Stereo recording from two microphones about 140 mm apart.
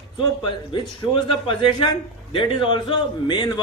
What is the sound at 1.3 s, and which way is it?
A man's voice, 40° left (ahead or behind).